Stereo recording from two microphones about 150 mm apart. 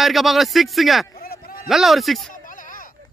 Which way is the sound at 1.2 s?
85° left.